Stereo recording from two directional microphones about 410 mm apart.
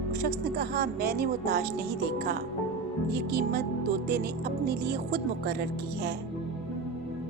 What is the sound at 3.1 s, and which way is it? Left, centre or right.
Speech, right.